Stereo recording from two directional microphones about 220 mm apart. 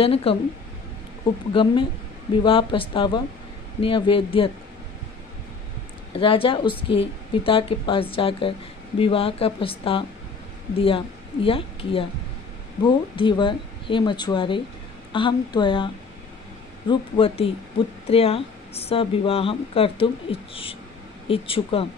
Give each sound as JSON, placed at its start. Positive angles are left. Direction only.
{"t": 0.0, "sound": "a woman's voice", "side_deg": 25}
{"t": 1.5, "sound": "a woman's voice", "side_deg": 25}
{"t": 6.1, "sound": "a woman's voice", "side_deg": 25}